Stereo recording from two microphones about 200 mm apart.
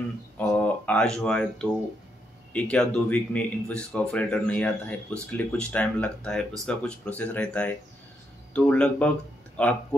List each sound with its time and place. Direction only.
0.4 s speech: 5° left (ahead or behind)